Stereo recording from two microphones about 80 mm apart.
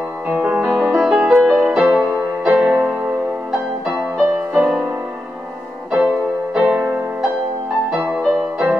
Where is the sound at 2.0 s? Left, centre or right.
Right.